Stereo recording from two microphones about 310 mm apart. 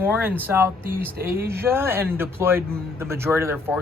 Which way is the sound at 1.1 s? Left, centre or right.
Right.